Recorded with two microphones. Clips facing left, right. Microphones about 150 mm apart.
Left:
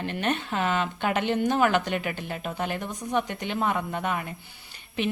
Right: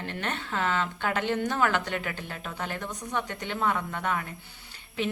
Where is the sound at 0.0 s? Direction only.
20° left (ahead or behind).